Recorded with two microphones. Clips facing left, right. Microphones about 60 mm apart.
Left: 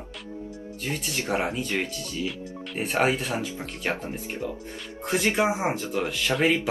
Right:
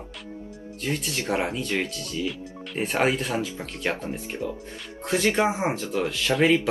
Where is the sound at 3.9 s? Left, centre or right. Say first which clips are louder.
Even; centre.